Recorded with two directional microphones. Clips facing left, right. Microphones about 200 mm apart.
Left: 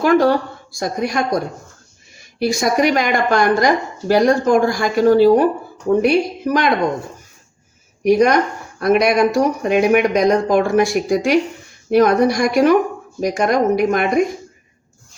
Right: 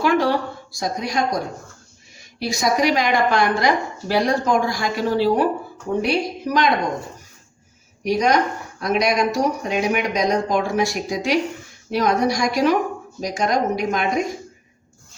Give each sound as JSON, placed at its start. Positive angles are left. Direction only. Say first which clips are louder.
{"t": 0.0, "sound": "speech", "louder": "left 5 dB", "side_deg": 45}
{"t": 2.4, "sound": "speech", "louder": "left 4 dB", "side_deg": 55}
{"t": 8.0, "sound": "speech", "louder": "left 5 dB", "side_deg": 55}